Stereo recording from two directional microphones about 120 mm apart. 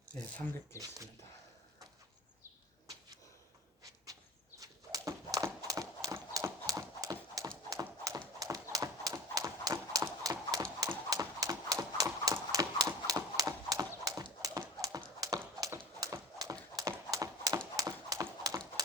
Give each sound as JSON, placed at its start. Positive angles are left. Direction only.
{"t": 0.7, "sound": "speech", "side_deg": 25}
{"t": 4.6, "sound": "dog", "side_deg": -30}
{"t": 5.6, "sound": "clip-clop", "side_deg": -30}
{"t": 8.7, "sound": "horse", "side_deg": -30}
{"t": 14.4, "sound": "clip-clop", "side_deg": -30}
{"t": 16.0, "sound": "horse", "side_deg": -25}